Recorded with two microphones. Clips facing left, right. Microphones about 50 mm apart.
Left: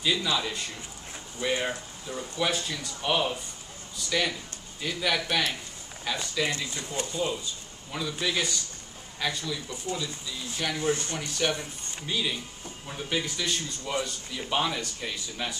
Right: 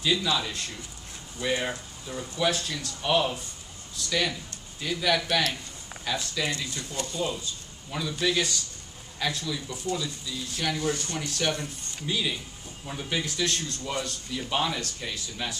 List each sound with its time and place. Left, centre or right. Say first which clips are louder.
0.0 s a man's voice: right 1 dB; centre
6.6 s a man's voice: left 1 dB; centre
9.8 s speech: right 2 dB; centre
11.1 s speech: even; centre
12.1 s a man's voice: right 1 dB; centre